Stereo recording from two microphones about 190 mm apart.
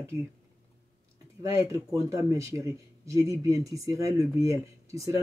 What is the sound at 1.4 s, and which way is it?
A man's voice, 15° right (ahead or behind).